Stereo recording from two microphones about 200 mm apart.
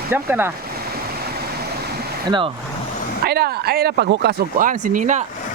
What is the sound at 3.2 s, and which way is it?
Speech, 50° right (ahead or behind).